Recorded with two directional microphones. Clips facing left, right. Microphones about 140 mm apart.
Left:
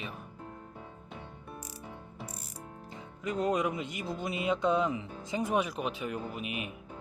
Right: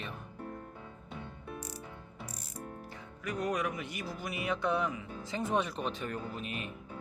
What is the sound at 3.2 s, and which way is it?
A man's voice, 25° left (ahead or behind).